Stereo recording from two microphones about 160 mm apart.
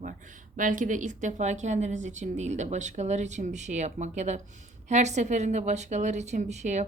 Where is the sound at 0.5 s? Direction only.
55° right (ahead or behind).